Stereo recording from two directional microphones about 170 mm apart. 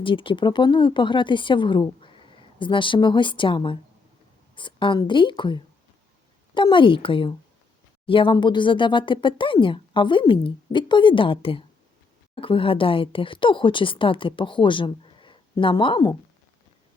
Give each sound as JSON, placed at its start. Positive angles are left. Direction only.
{"t": 0.0, "sound": "speech", "side_deg": 30}